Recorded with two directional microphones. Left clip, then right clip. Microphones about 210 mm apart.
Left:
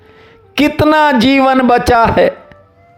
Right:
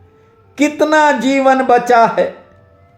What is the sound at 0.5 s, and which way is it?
Speech, 35° left (ahead or behind).